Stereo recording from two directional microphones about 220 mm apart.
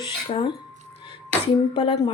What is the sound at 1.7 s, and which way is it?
Speech, 20° left (ahead or behind).